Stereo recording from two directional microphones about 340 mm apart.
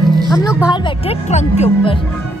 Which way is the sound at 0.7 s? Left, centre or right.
Centre.